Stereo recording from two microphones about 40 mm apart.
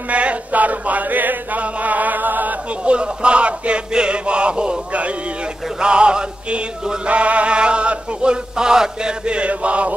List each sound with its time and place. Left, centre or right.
0.1 s chant: right
2.8 s male singing: right
7.1 s male singing: right